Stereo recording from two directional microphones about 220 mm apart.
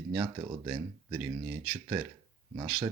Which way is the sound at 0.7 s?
5° right (ahead or behind).